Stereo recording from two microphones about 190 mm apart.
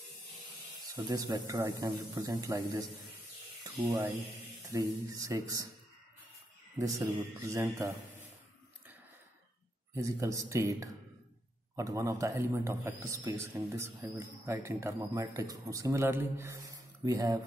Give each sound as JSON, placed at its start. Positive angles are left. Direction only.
{"t": 0.9, "sound": "a man's voice", "side_deg": -20}
{"t": 6.8, "sound": "speech", "side_deg": 0}
{"t": 7.1, "sound": "a man's voice", "side_deg": -15}
{"t": 9.9, "sound": "a man's voice", "side_deg": -15}